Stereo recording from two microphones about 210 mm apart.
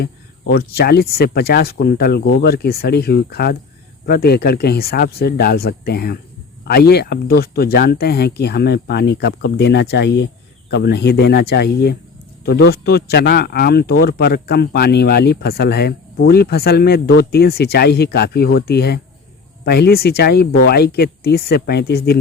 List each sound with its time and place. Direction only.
0.0 s speech: 50° left (ahead or behind)